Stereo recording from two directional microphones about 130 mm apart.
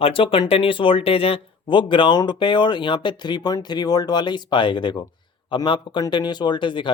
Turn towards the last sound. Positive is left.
turn(degrees=40)  # may be behind; listen again after turning